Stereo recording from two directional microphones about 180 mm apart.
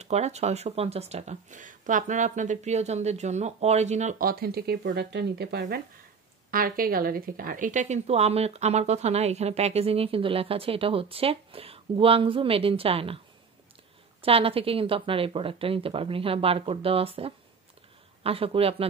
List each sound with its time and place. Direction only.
0.0 s a woman's voice: 40° right (ahead or behind); by 5.8 s 65° right (ahead or behind)
6.5 s a woman's voice: 55° right (ahead or behind); by 13.2 s 30° right (ahead or behind)
14.2 s a woman's voice: 30° right (ahead or behind)